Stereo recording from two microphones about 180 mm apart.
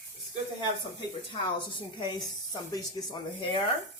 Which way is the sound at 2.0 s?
25° left (ahead or behind).